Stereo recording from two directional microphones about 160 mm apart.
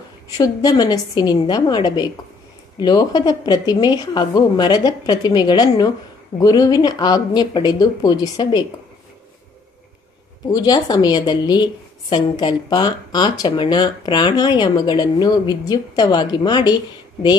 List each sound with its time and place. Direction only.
0.4 s a woman's voice: 25° left (ahead or behind)
10.5 s a woman's voice: 25° left (ahead or behind)